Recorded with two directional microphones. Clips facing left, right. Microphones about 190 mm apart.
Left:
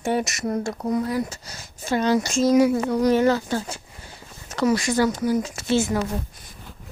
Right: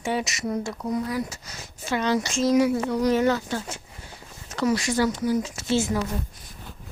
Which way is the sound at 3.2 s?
35° left (ahead or behind).